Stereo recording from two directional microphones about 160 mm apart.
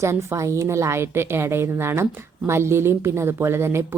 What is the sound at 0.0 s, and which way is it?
A woman's voice, 15° right (ahead or behind).